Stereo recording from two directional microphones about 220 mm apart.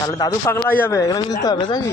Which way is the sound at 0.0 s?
15° left (ahead or behind).